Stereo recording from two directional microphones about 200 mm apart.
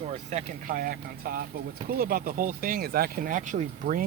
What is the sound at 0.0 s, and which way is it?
Speech, 30° right (ahead or behind).